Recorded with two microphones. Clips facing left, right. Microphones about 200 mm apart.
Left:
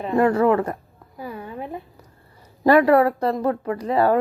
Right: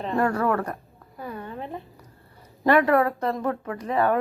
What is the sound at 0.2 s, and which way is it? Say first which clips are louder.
Speech: left 6 dB; 20° left (ahead or behind).